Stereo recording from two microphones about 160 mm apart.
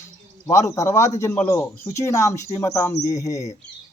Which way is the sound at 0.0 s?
20° left (ahead or behind).